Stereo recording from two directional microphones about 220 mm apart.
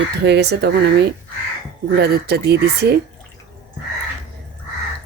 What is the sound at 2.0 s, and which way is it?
Speech, 50° right (ahead or behind).